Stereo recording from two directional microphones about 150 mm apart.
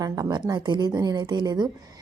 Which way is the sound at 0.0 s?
25° right (ahead or behind).